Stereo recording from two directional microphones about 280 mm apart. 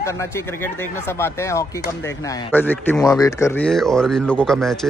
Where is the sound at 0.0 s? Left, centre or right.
Centre.